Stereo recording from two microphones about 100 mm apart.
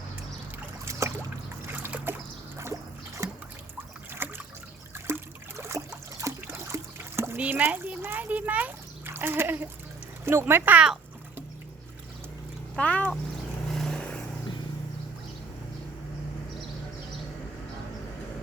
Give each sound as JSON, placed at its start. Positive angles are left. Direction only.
{"t": 0.9, "sound": "boat", "side_deg": -30}
{"t": 1.8, "sound": "trickle", "side_deg": -20}
{"t": 3.2, "sound": "boat", "side_deg": -30}
{"t": 4.2, "sound": "trickle", "side_deg": -20}
{"t": 7.3, "sound": "a sound", "side_deg": -15}
{"t": 10.2, "sound": "speech", "side_deg": -20}
{"t": 12.7, "sound": "cat", "side_deg": 15}
{"t": 13.7, "sound": "vehicle", "side_deg": 5}